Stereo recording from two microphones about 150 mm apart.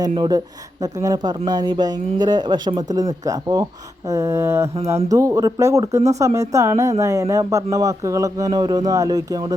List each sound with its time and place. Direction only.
0.2 s speech: 25° right (ahead or behind)